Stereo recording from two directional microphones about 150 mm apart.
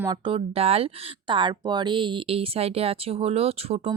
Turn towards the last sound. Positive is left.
turn(degrees=-40)  # may be behind; listen again after turning